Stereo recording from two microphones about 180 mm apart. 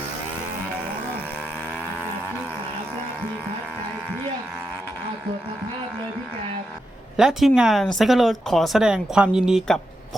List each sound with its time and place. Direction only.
7.2 s speech: centre (ahead or behind)